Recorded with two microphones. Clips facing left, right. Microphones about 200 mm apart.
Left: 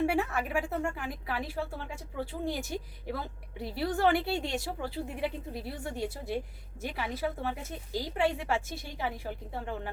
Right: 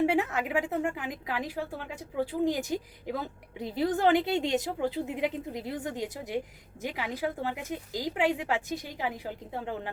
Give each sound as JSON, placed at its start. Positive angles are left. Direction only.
{"t": 0.0, "sound": "a woman's voice", "side_deg": -20}